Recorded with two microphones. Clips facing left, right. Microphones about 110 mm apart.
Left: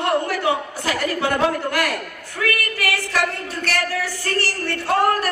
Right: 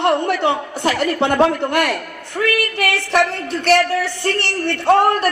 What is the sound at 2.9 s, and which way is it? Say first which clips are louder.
Speech: right 7 dB; 65° right (ahead or behind).